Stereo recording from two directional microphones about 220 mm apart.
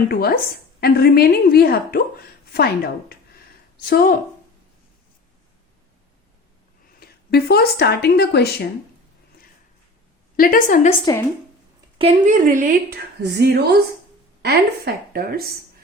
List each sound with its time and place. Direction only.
0.1 s a woman's voice: 45° left (ahead or behind)
7.0 s speech: 45° left (ahead or behind)
10.3 s a woman's voice: 40° left (ahead or behind)
10.8 s a woman's voice: 20° left (ahead or behind)
11.9 s a woman's voice: 30° right (ahead or behind)